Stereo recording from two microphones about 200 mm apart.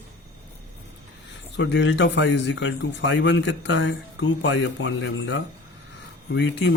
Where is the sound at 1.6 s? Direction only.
65° left (ahead or behind).